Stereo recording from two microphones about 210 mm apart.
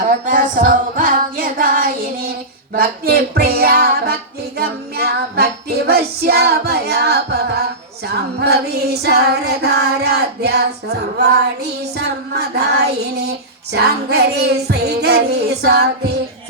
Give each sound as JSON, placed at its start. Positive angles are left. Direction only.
{"t": 0.3, "sound": "music", "side_deg": -40}
{"t": 2.7, "sound": "female singing", "side_deg": -45}